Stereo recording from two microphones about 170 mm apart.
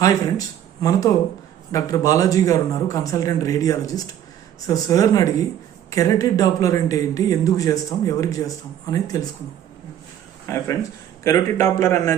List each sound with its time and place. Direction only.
0.0 s speech: 20° left (ahead or behind)
10.4 s speech: 15° left (ahead or behind)